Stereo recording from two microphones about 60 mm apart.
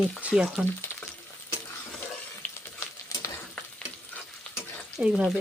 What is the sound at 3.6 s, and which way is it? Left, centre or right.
Stir, centre.